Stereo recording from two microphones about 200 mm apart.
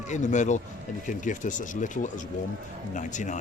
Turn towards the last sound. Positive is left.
turn(degrees=40)  # may be behind; listen again after turning